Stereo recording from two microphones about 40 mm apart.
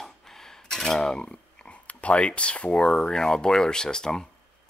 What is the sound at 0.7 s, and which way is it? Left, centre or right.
Cutlery, centre.